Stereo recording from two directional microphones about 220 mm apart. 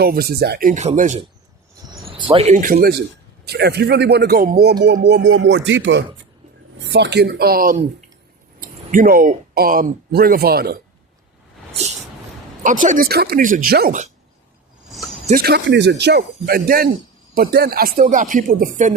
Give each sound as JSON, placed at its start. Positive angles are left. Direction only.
{"t": 0.0, "sound": "speech", "side_deg": -45}
{"t": 0.7, "sound": "speech", "side_deg": -35}
{"t": 1.9, "sound": "speech", "side_deg": -20}
{"t": 12.6, "sound": "speech", "side_deg": -35}
{"t": 15.3, "sound": "speech", "side_deg": -45}